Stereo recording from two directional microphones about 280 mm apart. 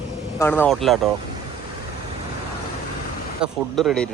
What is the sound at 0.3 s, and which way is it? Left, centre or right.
Speech, centre.